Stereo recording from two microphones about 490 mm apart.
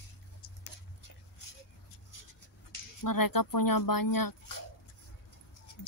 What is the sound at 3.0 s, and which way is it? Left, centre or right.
Speech, left.